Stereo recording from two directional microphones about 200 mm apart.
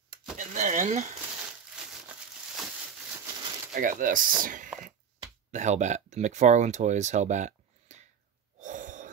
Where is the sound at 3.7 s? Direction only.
40° right (ahead or behind).